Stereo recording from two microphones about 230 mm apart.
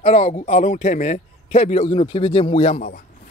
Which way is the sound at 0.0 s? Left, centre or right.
Left.